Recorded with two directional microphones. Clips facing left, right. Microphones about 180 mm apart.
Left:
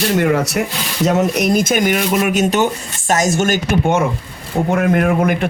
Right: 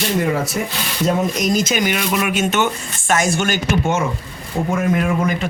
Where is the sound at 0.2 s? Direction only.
75° left (ahead or behind).